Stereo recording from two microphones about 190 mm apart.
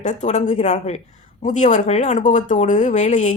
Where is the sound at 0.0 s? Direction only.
40° left (ahead or behind).